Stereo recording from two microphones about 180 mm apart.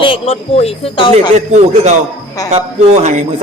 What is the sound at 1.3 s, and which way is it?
A man's voice, 40° right (ahead or behind).